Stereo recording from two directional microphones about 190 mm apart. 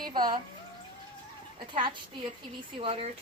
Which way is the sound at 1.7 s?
25° right (ahead or behind).